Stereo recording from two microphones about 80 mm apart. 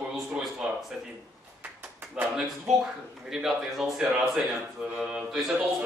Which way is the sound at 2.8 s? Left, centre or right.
Centre.